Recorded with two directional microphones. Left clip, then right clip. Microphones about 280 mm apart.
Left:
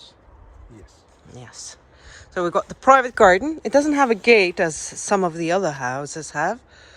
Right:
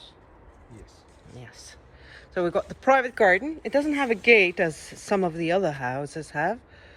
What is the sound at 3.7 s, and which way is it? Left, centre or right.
Speech, left.